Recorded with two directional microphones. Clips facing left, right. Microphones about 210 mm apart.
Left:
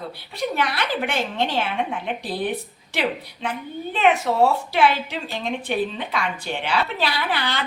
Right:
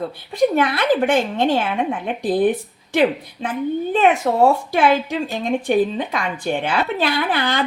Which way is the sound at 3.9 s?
50° right (ahead or behind).